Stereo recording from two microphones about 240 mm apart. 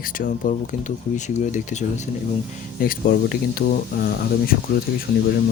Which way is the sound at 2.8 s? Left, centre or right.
Left.